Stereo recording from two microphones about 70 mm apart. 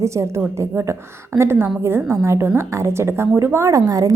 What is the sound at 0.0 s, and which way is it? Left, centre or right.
A woman's voice, right.